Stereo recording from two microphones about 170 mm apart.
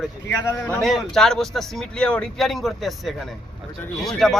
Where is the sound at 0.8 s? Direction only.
Centre (ahead or behind).